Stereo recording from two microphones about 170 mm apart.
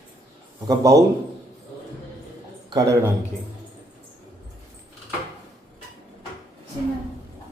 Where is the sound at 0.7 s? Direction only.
20° right (ahead or behind).